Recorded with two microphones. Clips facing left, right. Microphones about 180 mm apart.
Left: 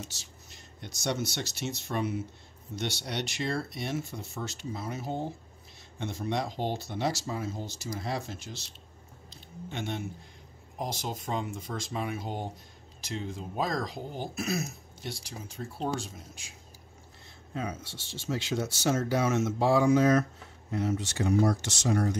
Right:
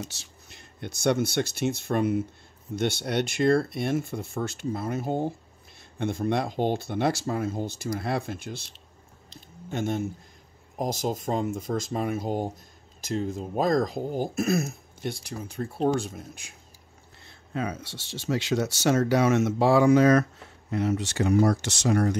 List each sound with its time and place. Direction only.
0.1 s speech: 60° right (ahead or behind)
17.6 s speech: 65° right (ahead or behind)